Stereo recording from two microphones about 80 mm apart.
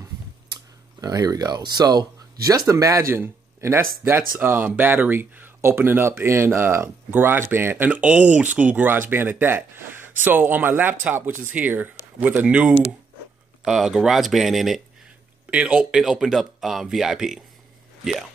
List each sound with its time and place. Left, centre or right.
1.0 s speech: right
3.1 s speech: right; by 14.8 s centre
15.5 s speech: centre